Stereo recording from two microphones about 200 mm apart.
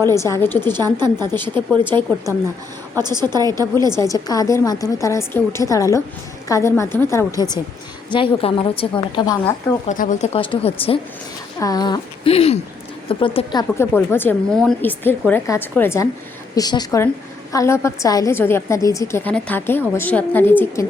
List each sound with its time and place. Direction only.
0.1 s a woman's voice: 15° left (ahead or behind)
0.8 s a woman's voice: 20° right (ahead or behind)
2.9 s a woman's voice: 20° right (ahead or behind)
3.9 s a woman's voice: 15° left (ahead or behind)
9.4 s speech: 35° left (ahead or behind); by 13.8 s 20° left (ahead or behind)
13.9 s a woman's voice: 10° left (ahead or behind)